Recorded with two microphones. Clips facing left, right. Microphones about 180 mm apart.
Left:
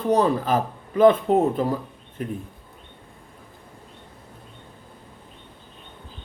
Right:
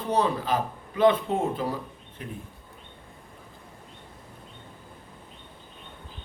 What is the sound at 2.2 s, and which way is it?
Speech, 45° left (ahead or behind).